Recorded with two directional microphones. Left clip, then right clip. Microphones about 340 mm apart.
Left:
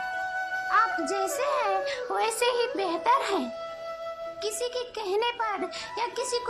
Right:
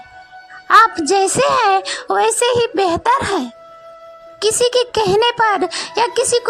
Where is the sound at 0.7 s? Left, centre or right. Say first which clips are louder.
Right 15 dB; right.